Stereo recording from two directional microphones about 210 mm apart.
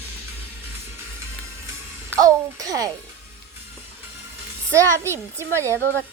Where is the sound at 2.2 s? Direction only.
15° right (ahead or behind).